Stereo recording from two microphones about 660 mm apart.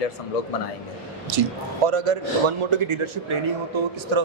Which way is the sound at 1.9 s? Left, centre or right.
Right.